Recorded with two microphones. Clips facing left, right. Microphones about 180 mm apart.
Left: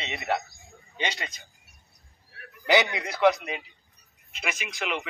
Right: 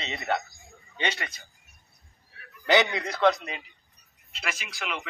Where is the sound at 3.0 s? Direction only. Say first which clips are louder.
Left 1 dB; 15° left (ahead or behind).